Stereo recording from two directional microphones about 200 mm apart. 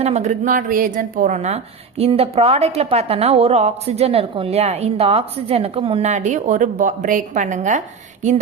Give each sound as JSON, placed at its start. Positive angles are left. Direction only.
{"t": 0.0, "sound": "a woman's voice", "side_deg": -35}